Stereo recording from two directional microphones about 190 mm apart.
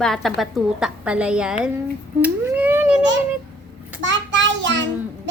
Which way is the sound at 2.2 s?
10° right (ahead or behind).